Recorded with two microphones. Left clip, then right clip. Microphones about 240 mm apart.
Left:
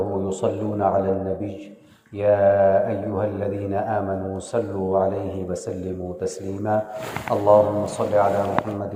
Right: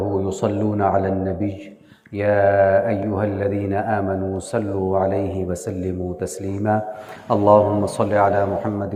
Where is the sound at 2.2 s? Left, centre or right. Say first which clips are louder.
Right 1 dB; right.